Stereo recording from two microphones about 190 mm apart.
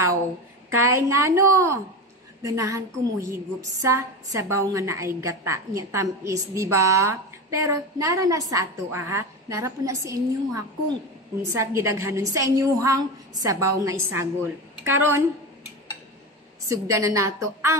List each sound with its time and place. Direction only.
0.7 s a woman's voice: 15° right (ahead or behind)
16.6 s a woman's voice: 15° right (ahead or behind)